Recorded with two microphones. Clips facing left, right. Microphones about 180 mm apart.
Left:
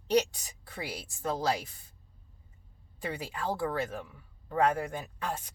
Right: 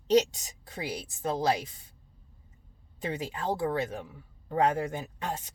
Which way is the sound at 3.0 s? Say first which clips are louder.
Right 2 dB; 20° right (ahead or behind).